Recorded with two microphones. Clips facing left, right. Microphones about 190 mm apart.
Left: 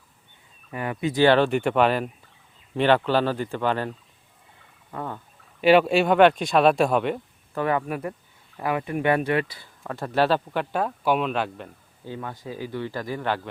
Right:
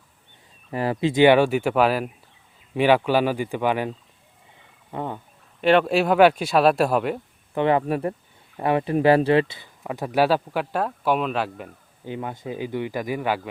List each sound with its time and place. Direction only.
0.7 s speech: 35° right (ahead or behind)
1.1 s speech: 15° right (ahead or behind)
5.6 s speech: 5° left (ahead or behind)
7.5 s speech: 25° right (ahead or behind)
9.8 s speech: 15° right (ahead or behind)
12.0 s speech: 20° right (ahead or behind)